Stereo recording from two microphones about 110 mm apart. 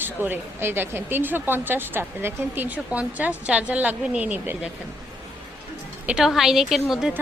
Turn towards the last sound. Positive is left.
turn(degrees=-5)  # may be behind; listen again after turning